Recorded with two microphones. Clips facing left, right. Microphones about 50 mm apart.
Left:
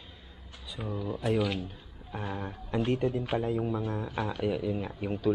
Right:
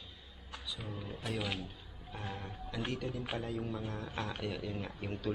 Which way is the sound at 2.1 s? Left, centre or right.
Left.